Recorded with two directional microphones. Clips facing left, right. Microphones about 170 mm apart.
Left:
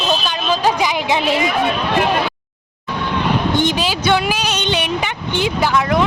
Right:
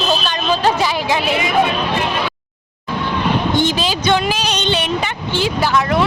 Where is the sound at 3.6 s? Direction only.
15° left (ahead or behind).